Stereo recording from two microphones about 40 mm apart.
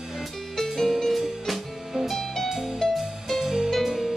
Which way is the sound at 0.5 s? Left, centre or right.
Centre.